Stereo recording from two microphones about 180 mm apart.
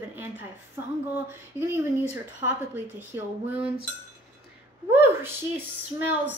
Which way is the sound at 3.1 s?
15° right (ahead or behind).